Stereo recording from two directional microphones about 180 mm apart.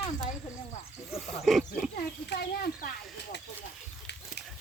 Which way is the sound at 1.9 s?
60° left (ahead or behind).